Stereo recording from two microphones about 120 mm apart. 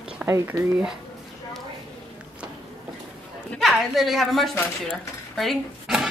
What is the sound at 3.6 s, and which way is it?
Speech, centre (ahead or behind).